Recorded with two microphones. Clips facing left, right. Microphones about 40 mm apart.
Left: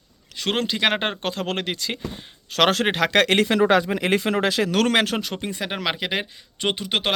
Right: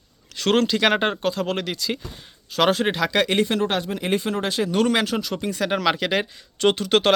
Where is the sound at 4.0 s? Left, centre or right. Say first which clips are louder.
Left 3 dB; left.